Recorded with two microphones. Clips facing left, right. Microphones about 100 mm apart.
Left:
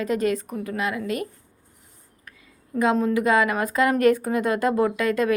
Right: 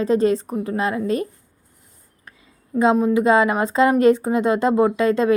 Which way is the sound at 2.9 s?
20° right (ahead or behind).